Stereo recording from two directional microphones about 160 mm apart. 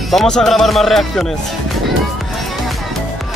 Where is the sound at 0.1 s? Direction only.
5° left (ahead or behind).